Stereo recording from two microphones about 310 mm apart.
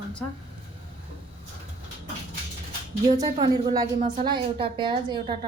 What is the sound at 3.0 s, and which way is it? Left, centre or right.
A woman's voice, centre.